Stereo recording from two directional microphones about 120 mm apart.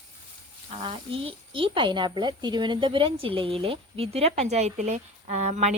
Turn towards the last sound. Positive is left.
turn(degrees=-70)  # may be behind; listen again after turning